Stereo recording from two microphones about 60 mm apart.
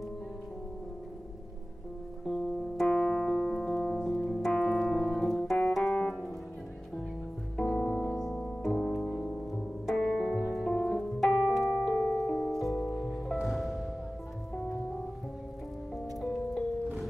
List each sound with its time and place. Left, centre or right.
2.2 s music: centre
5.1 s piano: centre
7.5 s piano: centre
10.5 s music: centre
11.3 s piano: centre
13.5 s music: centre
16.2 s music: centre